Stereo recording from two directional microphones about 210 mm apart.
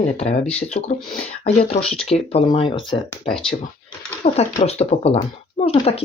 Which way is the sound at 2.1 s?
30° left (ahead or behind).